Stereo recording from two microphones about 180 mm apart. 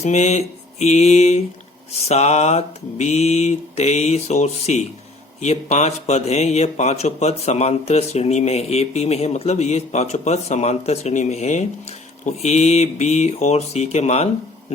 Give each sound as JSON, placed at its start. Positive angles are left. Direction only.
{"t": 0.0, "sound": "mantra", "side_deg": 40}
{"t": 1.9, "sound": "speech", "side_deg": 35}